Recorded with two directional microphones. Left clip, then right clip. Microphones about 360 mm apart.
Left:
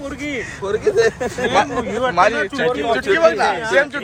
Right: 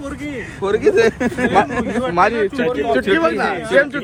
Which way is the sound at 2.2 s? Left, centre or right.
Centre.